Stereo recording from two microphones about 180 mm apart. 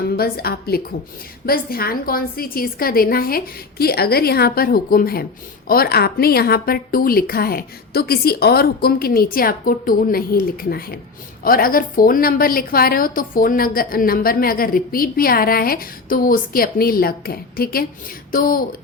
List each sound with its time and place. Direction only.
0.2 s a woman's voice: 60° left (ahead or behind)